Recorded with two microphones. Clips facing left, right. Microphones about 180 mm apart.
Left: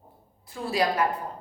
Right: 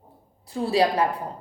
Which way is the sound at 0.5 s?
30° right (ahead or behind).